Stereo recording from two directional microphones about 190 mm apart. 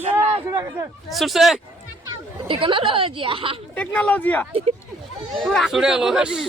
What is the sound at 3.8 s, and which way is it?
Speech, 5° left (ahead or behind).